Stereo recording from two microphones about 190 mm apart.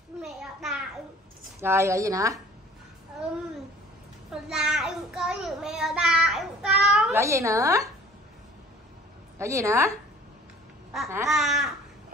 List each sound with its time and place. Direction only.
0.2 s a sound: centre (ahead or behind)
1.6 s speech: 15° right (ahead or behind)
4.3 s a child's voice: 5° right (ahead or behind)
7.1 s speech: 15° right (ahead or behind)
9.4 s speech: 15° right (ahead or behind)
11.2 s babbling: centre (ahead or behind)